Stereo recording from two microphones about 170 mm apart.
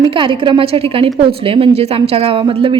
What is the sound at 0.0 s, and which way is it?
A woman's voice, 30° right (ahead or behind).